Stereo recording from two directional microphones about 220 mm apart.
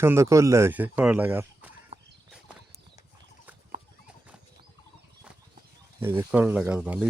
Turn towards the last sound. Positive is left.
turn(degrees=-5)  # may be behind; listen again after turning